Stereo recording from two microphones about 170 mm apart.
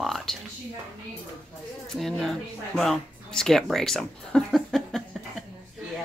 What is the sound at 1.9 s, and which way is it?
Speech, centre (ahead or behind).